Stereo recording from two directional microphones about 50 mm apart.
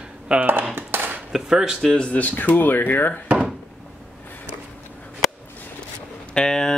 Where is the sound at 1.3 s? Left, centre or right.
Centre.